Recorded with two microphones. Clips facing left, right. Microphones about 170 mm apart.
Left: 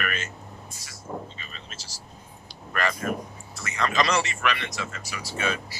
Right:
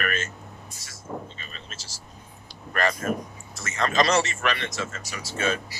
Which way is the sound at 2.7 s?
40° right (ahead or behind).